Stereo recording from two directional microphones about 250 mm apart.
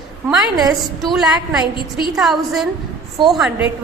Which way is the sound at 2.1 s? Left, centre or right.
Centre.